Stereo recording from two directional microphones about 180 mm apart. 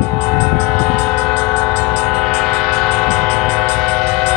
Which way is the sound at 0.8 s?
Centre (ahead or behind).